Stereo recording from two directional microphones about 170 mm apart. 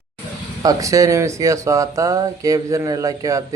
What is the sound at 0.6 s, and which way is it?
Speech, 20° right (ahead or behind).